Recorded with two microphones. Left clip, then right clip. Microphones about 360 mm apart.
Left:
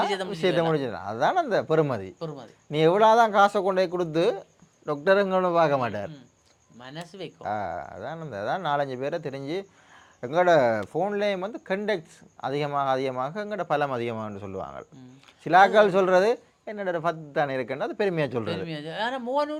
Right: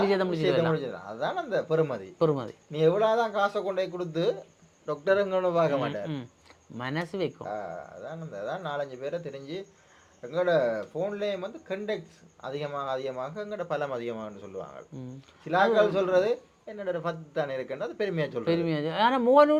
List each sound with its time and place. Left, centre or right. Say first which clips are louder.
0.0 s speech: right 1 dB; centre
0.7 s speech: left 4 dB; left
2.1 s speech: right 11 dB; right
2.7 s speech: left 5 dB; left
4.9 s a man's voice: left 4 dB; left
6.7 s speech: right 8 dB; right
7.4 s speech: left 5 dB; left
10.2 s speech: left 5 dB; left
15.4 s speech: left 6 dB; left
18.4 s speech: right 5 dB; centre